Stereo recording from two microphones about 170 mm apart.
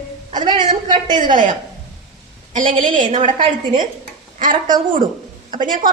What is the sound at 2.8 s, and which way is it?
Speech, 50° right (ahead or behind).